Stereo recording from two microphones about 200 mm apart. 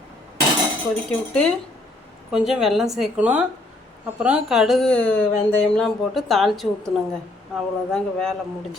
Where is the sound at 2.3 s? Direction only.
Centre (ahead or behind).